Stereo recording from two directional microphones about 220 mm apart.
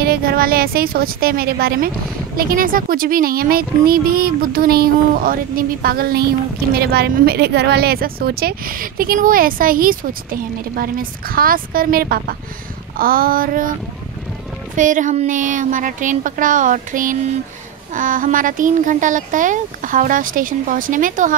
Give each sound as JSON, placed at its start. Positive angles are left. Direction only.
{"t": 0.0, "sound": "speech", "side_deg": -45}
{"t": 14.8, "sound": "speech", "side_deg": -35}